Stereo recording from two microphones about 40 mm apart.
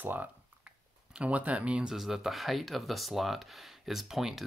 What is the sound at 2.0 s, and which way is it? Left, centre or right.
Speech, centre.